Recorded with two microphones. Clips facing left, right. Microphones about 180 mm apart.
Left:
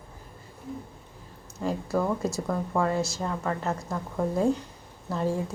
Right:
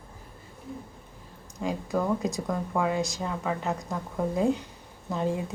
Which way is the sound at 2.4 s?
5° left (ahead or behind).